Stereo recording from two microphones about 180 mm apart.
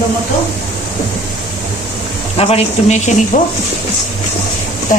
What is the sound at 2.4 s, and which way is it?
Speech, 35° left (ahead or behind).